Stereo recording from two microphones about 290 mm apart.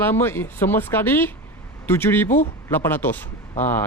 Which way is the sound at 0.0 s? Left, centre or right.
Centre.